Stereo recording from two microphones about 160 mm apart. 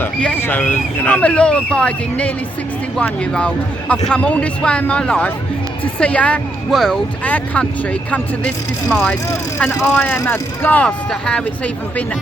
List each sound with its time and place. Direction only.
0.0 s speech: 10° left (ahead or behind)